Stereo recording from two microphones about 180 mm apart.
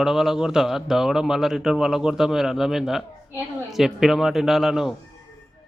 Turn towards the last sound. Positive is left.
turn(degrees=0)  # may be behind; listen again after turning